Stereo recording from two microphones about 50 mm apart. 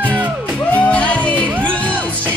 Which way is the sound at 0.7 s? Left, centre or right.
Left.